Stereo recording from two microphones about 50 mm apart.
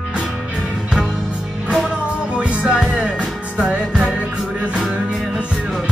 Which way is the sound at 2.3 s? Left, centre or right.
Centre.